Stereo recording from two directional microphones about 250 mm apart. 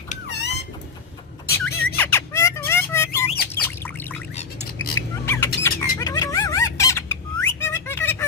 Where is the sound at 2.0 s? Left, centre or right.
Centre.